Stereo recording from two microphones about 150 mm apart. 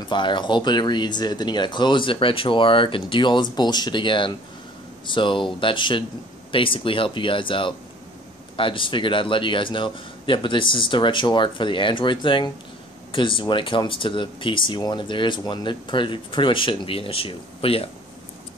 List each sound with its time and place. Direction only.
0.1 s speech: 30° left (ahead or behind)